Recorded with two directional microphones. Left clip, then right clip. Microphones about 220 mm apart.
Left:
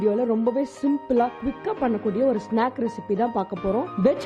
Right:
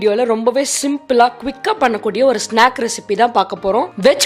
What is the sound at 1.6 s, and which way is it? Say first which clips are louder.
Speech: right 10 dB; 10° right (ahead or behind).